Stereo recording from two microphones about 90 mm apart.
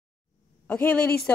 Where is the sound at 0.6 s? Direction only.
15° left (ahead or behind).